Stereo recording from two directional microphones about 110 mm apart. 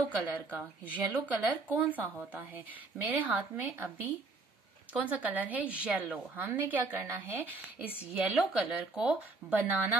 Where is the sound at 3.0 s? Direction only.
15° right (ahead or behind).